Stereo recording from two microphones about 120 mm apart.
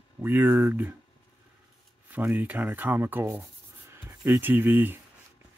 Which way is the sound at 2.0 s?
15° right (ahead or behind).